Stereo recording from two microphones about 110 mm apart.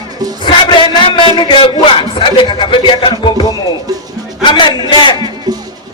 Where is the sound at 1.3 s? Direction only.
50° left (ahead or behind).